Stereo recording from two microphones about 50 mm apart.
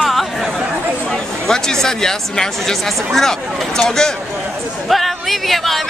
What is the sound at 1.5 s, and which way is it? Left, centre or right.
Speech, centre.